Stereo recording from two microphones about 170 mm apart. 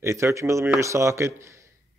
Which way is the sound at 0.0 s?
15° right (ahead or behind).